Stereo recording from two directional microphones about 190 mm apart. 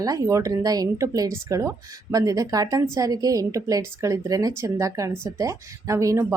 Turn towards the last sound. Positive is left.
turn(degrees=-15)  # may be behind; listen again after turning